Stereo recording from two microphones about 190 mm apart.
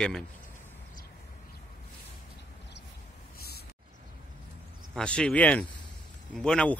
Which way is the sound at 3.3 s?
55° left (ahead or behind).